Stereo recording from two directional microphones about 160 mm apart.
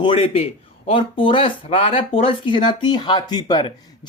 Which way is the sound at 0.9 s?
35° left (ahead or behind).